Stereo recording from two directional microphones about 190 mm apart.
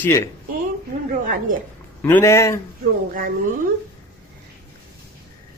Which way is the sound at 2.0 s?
15° left (ahead or behind).